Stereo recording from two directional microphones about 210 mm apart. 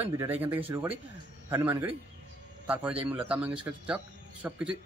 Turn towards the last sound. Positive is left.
turn(degrees=-5)  # may be behind; listen again after turning